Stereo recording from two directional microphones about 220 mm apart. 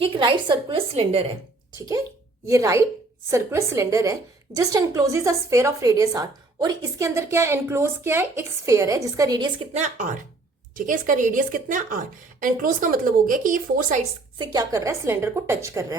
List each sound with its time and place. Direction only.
0.0 s a woman's voice: 20° right (ahead or behind)
2.5 s a woman's voice: 15° right (ahead or behind)
9.7 s a woman's voice: 35° right (ahead or behind)
14.3 s a woman's voice: 20° right (ahead or behind)